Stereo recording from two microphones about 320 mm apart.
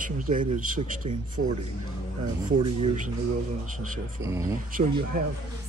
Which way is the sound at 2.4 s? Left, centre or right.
Centre.